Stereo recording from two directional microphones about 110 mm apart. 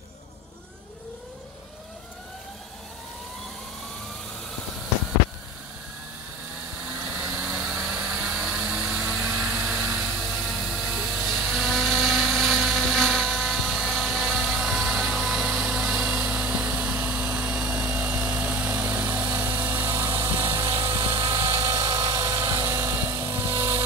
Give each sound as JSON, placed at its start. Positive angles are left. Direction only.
{"t": 7.2, "sound": "vehicle", "side_deg": -10}
{"t": 13.4, "sound": "helicopter", "side_deg": -5}